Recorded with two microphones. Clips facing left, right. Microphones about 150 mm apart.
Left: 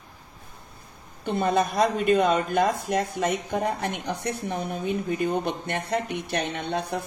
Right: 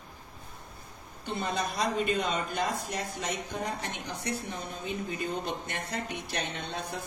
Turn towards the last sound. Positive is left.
turn(degrees=60)  # may be behind; listen again after turning